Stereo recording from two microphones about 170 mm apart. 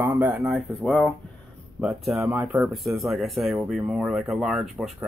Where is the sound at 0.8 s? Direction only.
10° left (ahead or behind).